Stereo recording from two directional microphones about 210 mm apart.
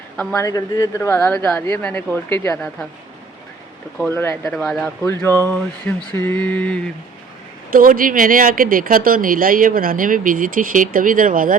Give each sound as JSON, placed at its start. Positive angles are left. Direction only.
{"t": 0.2, "sound": "speech", "side_deg": 5}
{"t": 0.4, "sound": "mantra", "side_deg": 15}
{"t": 3.9, "sound": "mantra", "side_deg": 5}
{"t": 4.4, "sound": "speech", "side_deg": 0}
{"t": 5.0, "sound": "mantra", "side_deg": 10}
{"t": 7.7, "sound": "speech", "side_deg": -40}